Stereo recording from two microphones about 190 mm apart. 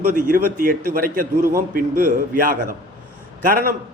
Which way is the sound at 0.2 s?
45° right (ahead or behind).